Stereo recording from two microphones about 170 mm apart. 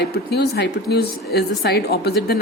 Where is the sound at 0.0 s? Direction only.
70° left (ahead or behind).